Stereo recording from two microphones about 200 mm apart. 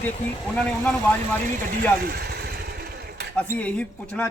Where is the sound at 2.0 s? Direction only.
50° right (ahead or behind).